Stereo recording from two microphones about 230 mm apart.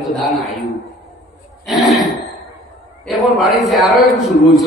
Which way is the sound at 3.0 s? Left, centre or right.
Centre.